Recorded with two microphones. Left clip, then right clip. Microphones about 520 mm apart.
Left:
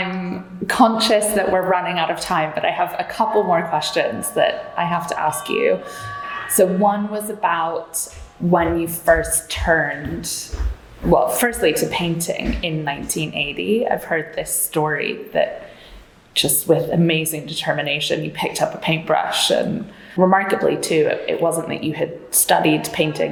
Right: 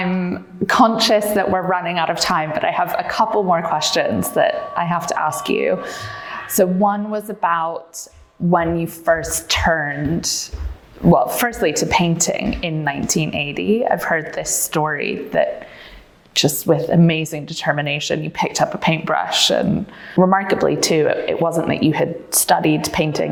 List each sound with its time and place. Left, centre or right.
0.7 s a woman's voice: right
11.1 s speech: right